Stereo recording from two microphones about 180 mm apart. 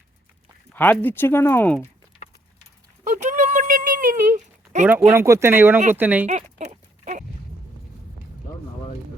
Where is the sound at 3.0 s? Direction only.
45° right (ahead or behind).